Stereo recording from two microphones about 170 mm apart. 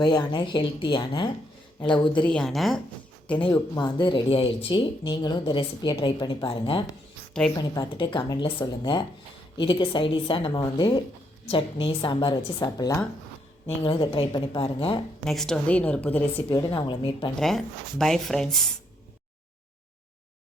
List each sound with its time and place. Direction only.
0.0 s speech: 25° left (ahead or behind)
2.2 s speech: 5° left (ahead or behind)
3.5 s a woman's voice: 25° left (ahead or behind)
15.3 s a woman's voice: centre (ahead or behind)
16.3 s speech: 25° left (ahead or behind)
17.3 s speech: centre (ahead or behind)